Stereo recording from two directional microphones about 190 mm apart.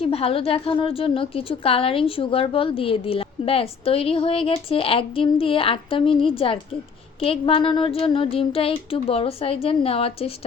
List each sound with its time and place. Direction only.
0.0 s a woman's voice: 30° left (ahead or behind)